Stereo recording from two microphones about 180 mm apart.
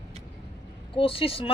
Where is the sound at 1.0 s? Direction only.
30° left (ahead or behind).